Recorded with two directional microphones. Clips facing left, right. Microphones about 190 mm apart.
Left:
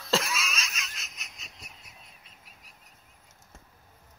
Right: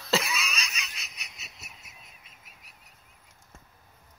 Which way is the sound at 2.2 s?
40° left (ahead or behind).